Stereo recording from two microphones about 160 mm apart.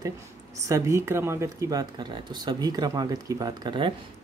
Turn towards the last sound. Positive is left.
turn(degrees=-30)  # may be behind; listen again after turning